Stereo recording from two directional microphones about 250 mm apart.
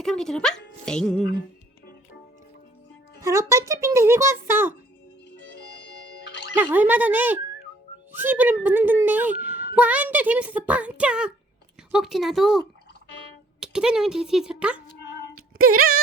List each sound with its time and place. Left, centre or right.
0.0 s speech: centre
3.2 s a child's voice: centre
6.7 s a child's voice: centre
15.5 s music: right